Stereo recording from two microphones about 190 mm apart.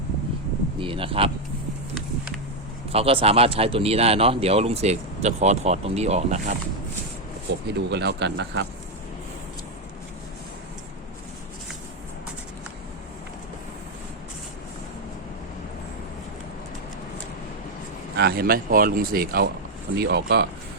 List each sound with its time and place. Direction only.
0.8 s speech: 30° right (ahead or behind)
2.9 s speech: 30° right (ahead or behind)
7.7 s speech: 65° right (ahead or behind)
18.2 s speech: 55° right (ahead or behind)